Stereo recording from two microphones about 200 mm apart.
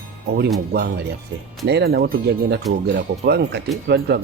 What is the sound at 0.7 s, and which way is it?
Speech, 60° right (ahead or behind).